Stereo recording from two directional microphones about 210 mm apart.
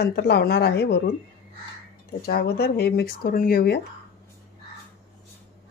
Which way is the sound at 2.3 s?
50° left (ahead or behind).